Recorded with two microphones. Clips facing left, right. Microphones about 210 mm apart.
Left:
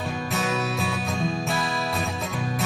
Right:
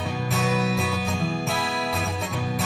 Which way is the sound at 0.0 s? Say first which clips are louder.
Right 1 dB; centre (ahead or behind).